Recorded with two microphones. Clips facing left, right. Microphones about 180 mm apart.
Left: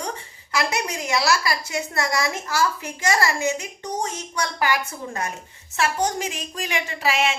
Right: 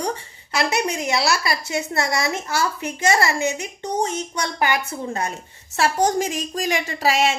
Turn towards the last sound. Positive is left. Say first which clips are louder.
# right 3 dB
turn(degrees=-40)  # may be behind; listen again after turning